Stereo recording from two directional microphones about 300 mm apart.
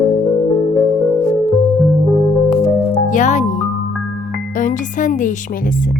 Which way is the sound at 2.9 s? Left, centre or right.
Left.